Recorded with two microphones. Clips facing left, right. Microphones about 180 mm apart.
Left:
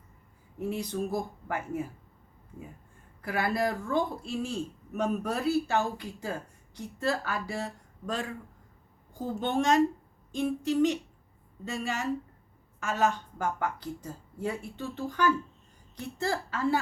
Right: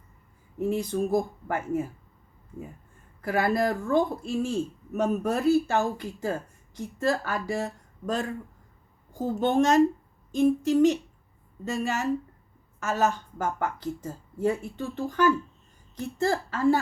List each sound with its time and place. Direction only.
0.8 s speech: 50° right (ahead or behind)
3.2 s speech: 45° right (ahead or behind)